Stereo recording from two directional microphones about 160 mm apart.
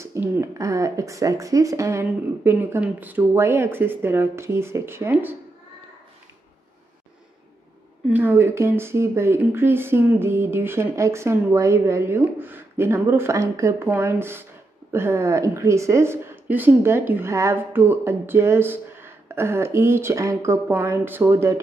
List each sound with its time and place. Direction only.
0.0 s a woman's voice: 15° right (ahead or behind)
8.1 s a woman's voice: 10° right (ahead or behind)